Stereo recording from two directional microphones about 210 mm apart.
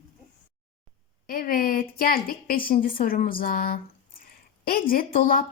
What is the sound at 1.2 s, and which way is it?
A woman's voice, 45° left (ahead or behind).